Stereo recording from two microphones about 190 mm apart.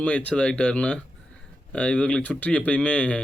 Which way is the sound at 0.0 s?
5° left (ahead or behind).